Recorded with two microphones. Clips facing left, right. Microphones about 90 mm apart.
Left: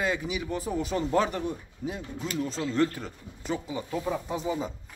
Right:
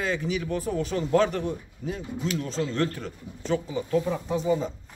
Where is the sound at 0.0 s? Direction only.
10° left (ahead or behind).